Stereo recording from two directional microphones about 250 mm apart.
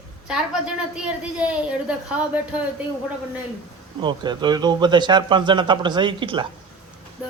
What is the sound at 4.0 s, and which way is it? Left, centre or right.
A man's voice, centre.